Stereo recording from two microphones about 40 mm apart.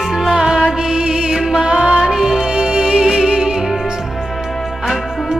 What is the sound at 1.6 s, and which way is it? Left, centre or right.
Music, right.